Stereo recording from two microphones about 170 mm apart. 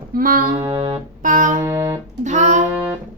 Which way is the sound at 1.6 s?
15° right (ahead or behind).